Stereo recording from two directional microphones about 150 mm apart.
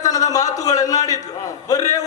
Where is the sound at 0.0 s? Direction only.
25° left (ahead or behind).